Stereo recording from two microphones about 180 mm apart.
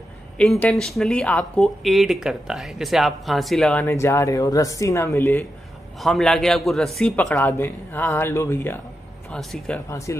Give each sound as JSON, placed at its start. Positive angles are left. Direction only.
{"t": 0.4, "sound": "speech", "side_deg": 5}
{"t": 5.9, "sound": "speech", "side_deg": 0}
{"t": 9.8, "sound": "speech", "side_deg": 15}